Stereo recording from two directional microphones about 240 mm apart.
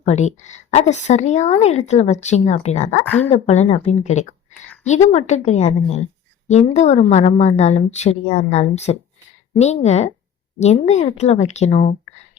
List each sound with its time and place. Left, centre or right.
0.0 s a woman's voice: left